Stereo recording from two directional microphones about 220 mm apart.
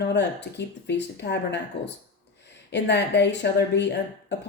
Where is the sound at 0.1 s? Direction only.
50° left (ahead or behind).